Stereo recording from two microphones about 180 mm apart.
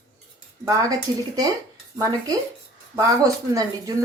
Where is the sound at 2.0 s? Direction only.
20° right (ahead or behind).